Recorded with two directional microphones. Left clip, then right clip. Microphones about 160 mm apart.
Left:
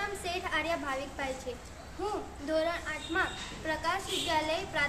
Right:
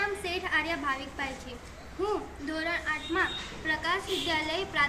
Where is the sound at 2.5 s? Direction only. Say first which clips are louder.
Even; 25° left (ahead or behind).